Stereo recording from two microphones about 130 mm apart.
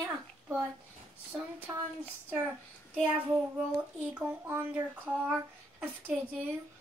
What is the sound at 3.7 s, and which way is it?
A child's voice, 10° right (ahead or behind).